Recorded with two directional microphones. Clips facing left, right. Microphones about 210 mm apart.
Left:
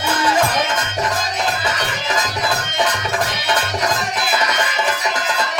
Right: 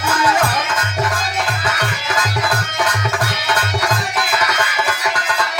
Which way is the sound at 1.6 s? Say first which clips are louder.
Even; 20° left (ahead or behind).